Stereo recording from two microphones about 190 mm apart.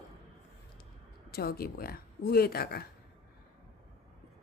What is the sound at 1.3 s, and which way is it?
A woman's voice, 55° left (ahead or behind).